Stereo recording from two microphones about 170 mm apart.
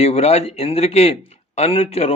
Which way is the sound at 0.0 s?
40° left (ahead or behind).